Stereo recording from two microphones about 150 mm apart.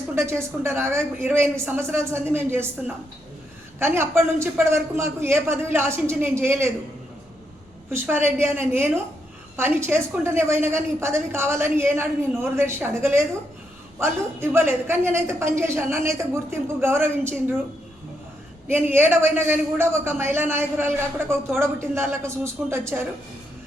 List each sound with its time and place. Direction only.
0.2 s a man's voice: 15° right (ahead or behind)
7.9 s a man's voice: 15° right (ahead or behind)
18.7 s a man's voice: 15° right (ahead or behind)